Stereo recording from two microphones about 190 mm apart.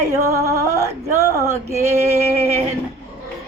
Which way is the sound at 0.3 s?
15° right (ahead or behind).